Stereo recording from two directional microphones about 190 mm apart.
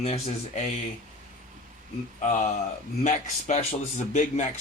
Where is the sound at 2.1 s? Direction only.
40° left (ahead or behind).